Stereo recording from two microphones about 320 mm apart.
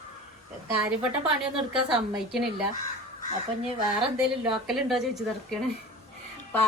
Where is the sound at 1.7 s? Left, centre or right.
Centre.